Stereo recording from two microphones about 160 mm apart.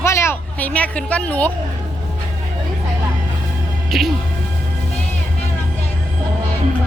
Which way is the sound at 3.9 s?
Centre (ahead or behind).